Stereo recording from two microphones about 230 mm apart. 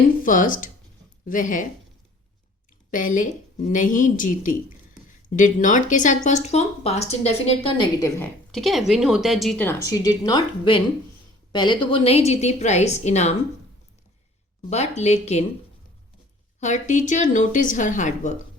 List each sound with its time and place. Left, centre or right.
0.3 s a woman's voice: left
2.9 s a woman's voice: left; by 8.3 s centre
8.5 s speech: centre; by 13.3 s left
14.7 s speech: left
16.6 s a woman's voice: left